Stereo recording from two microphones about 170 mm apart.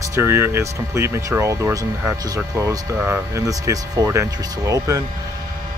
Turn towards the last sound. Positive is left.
turn(degrees=-20)  # may be behind; listen again after turning